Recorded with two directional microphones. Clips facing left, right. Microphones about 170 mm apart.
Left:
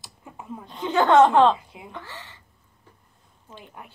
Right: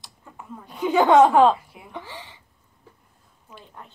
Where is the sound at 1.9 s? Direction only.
15° right (ahead or behind).